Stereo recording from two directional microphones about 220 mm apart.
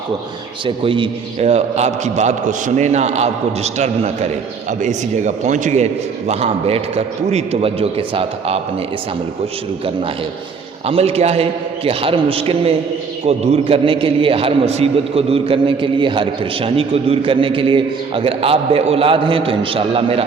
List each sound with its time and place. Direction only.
0.6 s a man's voice: 25° right (ahead or behind)
10.8 s a man's voice: 25° right (ahead or behind)